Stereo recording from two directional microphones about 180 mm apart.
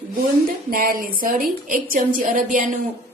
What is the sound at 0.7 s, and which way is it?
A woman's voice, 50° right (ahead or behind).